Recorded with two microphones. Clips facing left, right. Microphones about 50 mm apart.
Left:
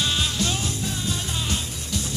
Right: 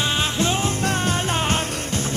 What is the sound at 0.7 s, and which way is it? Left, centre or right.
Music, right.